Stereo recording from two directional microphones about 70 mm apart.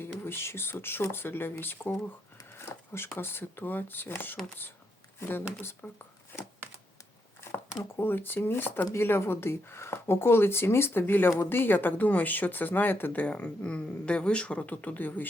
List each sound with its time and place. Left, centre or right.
0.3 s speech: left
2.5 s a sound: left
3.2 s speech: left
5.8 s speech: left
7.9 s speech: left
13.2 s speech: centre